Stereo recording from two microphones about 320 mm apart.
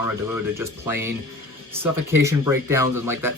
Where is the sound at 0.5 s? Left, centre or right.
Centre.